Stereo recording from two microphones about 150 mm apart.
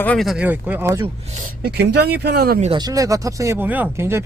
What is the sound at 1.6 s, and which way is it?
Speech, 90° right.